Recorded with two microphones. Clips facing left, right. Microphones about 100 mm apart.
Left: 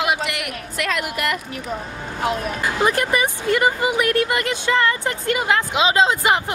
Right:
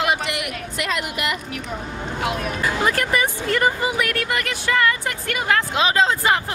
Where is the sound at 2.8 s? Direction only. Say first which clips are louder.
Left 3 dB; 20° left (ahead or behind).